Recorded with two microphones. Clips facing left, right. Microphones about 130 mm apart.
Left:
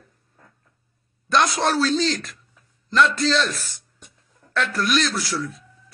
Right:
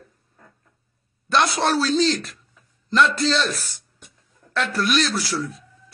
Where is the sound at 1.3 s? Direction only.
30° right (ahead or behind).